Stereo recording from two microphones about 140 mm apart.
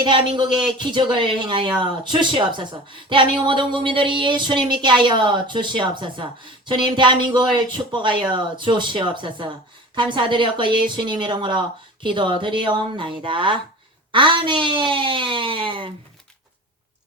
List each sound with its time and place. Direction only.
0.0 s speech: 35° right (ahead or behind)